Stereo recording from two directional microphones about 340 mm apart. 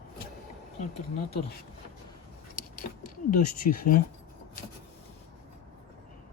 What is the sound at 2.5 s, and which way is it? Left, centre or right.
Vehicle, left.